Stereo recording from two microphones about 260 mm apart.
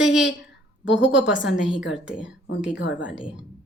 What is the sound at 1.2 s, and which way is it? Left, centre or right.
Speech, left.